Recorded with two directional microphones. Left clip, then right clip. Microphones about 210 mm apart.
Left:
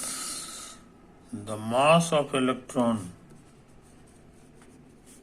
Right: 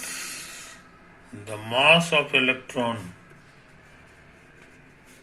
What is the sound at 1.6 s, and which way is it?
Speech, 30° left (ahead or behind).